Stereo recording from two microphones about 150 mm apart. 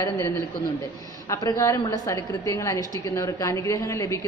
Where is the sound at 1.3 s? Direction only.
20° left (ahead or behind).